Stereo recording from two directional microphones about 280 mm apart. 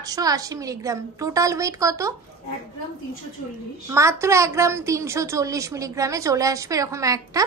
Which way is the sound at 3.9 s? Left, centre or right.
Centre.